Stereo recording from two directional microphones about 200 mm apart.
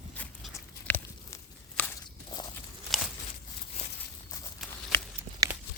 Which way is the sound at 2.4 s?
25° left (ahead or behind).